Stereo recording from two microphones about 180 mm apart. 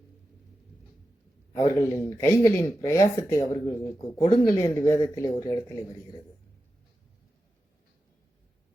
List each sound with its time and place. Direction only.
1.5 s speech: 20° left (ahead or behind)